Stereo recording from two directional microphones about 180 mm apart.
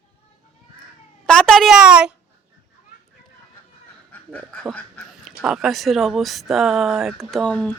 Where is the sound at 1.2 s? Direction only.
5° left (ahead or behind).